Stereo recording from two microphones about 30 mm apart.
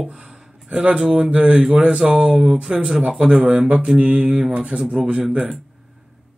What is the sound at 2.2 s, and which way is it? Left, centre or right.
Speech, centre.